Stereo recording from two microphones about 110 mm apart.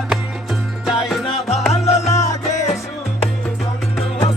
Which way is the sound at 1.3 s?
70° left (ahead or behind).